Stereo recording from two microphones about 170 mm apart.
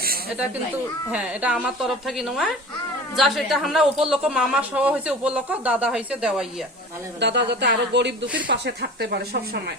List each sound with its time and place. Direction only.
1.1 s speech: 10° right (ahead or behind)
7.2 s speech: 90° right; by 9.7 s 75° right (ahead or behind)